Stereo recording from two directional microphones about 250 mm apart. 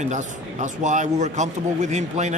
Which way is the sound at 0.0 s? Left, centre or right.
Right.